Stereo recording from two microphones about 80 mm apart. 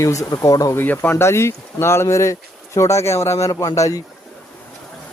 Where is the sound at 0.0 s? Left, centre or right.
Left.